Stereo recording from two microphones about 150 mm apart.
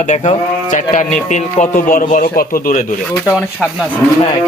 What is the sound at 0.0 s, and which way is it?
A man's voice, 50° left (ahead or behind).